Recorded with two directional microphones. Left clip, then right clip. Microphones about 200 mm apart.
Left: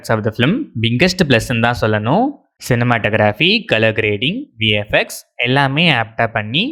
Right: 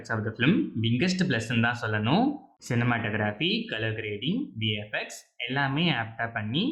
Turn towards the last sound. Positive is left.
turn(degrees=50)  # may be behind; listen again after turning